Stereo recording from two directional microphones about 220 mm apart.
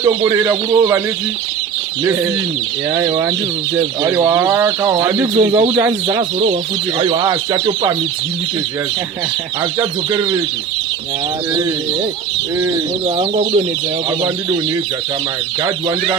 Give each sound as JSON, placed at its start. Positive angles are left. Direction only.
{"t": 0.0, "sound": "speech", "side_deg": -20}
{"t": 2.9, "sound": "speech", "side_deg": -15}
{"t": 10.1, "sound": "speech", "side_deg": -20}
{"t": 13.1, "sound": "speech", "side_deg": -25}